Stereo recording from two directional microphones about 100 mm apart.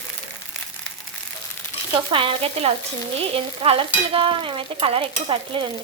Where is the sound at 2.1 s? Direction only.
65° right (ahead or behind); by 2.7 s 85° right.